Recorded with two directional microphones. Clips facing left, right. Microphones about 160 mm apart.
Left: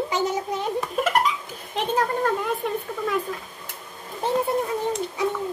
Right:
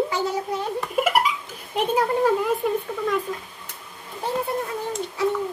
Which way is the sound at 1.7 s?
10° right (ahead or behind).